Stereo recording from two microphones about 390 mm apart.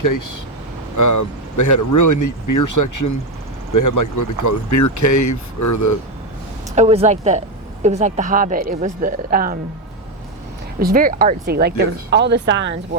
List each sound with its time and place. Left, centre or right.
0.0 s speech: left
6.7 s a woman's voice: centre
10.8 s speech: right